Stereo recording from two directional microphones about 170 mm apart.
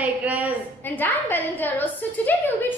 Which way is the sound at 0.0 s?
10° right (ahead or behind).